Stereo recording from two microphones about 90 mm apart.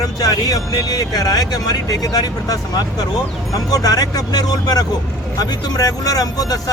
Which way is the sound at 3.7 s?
45° left (ahead or behind).